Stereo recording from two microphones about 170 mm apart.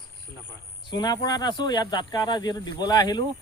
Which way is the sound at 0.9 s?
25° left (ahead or behind).